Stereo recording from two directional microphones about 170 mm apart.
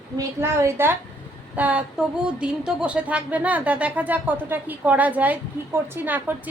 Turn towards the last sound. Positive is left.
turn(degrees=-10)  # may be behind; listen again after turning